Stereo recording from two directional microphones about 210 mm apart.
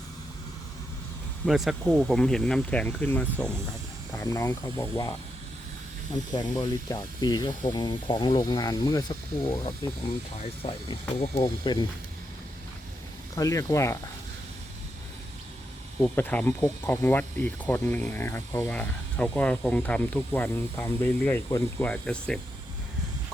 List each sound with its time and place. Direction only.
1.5 s speech: centre (ahead or behind); by 5.1 s 15° left (ahead or behind)
6.3 s speech: 20° left (ahead or behind)
13.3 s speech: 15° left (ahead or behind)
16.0 s speech: 5° left (ahead or behind)